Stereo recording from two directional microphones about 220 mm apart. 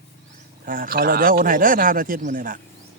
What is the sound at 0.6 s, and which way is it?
Speech, 40° right (ahead or behind).